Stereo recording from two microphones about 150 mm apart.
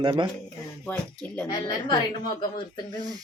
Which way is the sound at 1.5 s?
30° left (ahead or behind).